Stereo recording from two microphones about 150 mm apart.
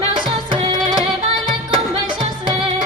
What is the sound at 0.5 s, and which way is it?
Music, 30° right (ahead or behind).